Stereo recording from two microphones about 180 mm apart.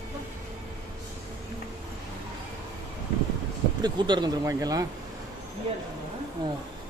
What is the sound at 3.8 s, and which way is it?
Speech, 25° right (ahead or behind).